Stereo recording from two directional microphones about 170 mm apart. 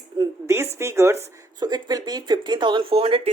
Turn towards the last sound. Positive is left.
turn(degrees=-35)  # may be behind; listen again after turning